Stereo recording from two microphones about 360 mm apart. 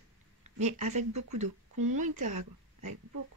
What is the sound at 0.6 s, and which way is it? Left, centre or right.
Speech, centre.